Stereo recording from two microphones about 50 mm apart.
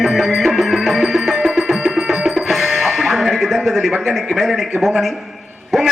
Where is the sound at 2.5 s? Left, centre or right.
Centre.